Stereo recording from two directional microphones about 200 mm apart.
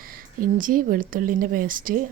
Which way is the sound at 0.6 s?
45° right (ahead or behind).